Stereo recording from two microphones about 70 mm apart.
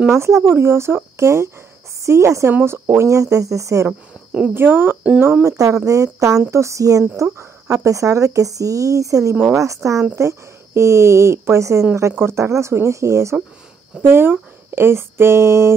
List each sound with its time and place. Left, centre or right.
0.1 s a woman's voice: right
4.6 s speech: right
5.4 s a woman's voice: right
14.0 s speech: right